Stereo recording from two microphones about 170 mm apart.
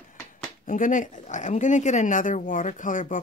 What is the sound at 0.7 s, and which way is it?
Speech, 50° left (ahead or behind).